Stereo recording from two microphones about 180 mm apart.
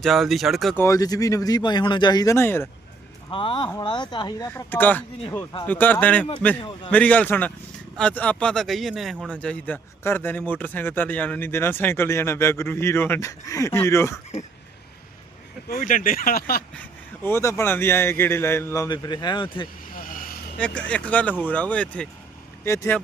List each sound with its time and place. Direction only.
0.0 s speech: centre (ahead or behind)
0.8 s speech: 20° left (ahead or behind)
3.2 s speech: 30° left (ahead or behind); by 6.2 s 10° left (ahead or behind)
6.6 s a man's voice: 30° left (ahead or behind)
6.9 s speech: 10° left (ahead or behind)
15.7 s speech: 45° left (ahead or behind)
17.2 s speech: 15° left (ahead or behind)
19.9 s vehicle: 50° left (ahead or behind)
20.6 s speech: 5° left (ahead or behind)